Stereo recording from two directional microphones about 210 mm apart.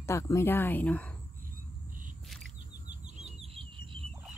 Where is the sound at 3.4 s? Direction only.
25° right (ahead or behind).